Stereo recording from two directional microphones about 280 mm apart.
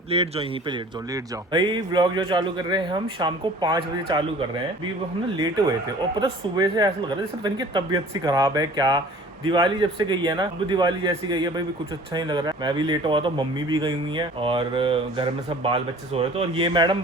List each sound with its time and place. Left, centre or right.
0.1 s speech: right
6.1 s speech: centre